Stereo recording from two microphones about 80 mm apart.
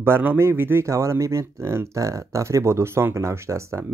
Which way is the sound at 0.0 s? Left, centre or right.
Right.